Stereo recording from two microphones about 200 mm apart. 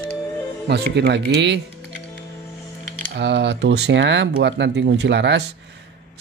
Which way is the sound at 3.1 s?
60° right (ahead or behind).